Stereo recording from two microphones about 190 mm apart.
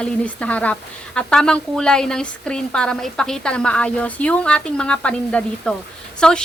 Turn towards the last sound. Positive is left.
turn(degrees=5)  # may be behind; listen again after turning